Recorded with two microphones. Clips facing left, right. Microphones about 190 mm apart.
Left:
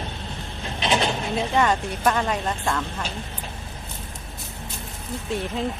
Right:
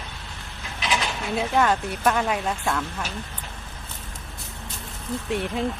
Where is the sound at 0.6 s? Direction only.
25° left (ahead or behind).